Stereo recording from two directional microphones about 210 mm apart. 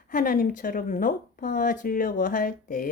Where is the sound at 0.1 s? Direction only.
40° left (ahead or behind).